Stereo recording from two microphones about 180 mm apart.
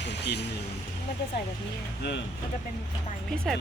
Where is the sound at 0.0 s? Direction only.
70° left (ahead or behind).